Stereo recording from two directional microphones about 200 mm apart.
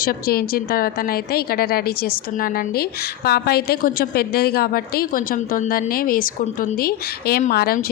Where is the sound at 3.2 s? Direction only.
50° left (ahead or behind).